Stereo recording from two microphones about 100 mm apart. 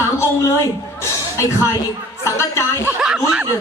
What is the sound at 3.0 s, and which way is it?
Chuckle, 5° right (ahead or behind).